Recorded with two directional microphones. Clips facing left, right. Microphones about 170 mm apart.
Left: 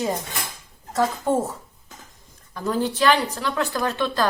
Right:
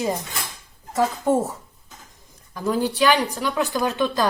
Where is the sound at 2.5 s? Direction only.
10° right (ahead or behind).